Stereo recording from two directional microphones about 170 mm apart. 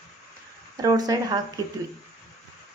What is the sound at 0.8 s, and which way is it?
Speech, 20° right (ahead or behind).